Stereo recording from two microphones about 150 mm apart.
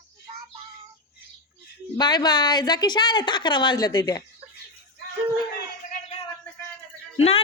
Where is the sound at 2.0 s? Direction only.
30° left (ahead or behind).